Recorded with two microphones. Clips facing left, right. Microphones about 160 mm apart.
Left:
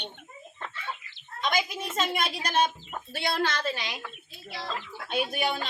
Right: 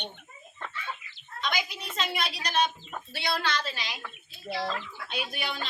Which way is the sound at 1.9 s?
50° left (ahead or behind).